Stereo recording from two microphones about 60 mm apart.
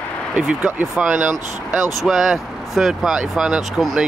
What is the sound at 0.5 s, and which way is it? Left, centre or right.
Speech, right.